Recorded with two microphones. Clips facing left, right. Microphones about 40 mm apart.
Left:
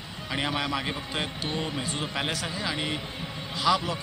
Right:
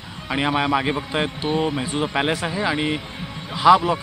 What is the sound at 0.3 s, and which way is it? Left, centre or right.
A man's voice, right.